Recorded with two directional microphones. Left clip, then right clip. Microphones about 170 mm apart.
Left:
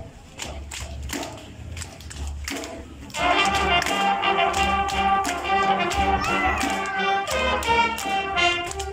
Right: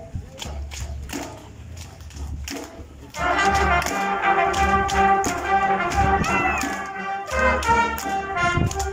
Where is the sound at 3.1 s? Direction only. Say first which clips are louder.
Right 1 dB; 5° left (ahead or behind).